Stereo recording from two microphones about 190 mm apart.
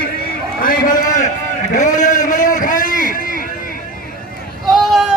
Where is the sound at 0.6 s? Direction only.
45° left (ahead or behind).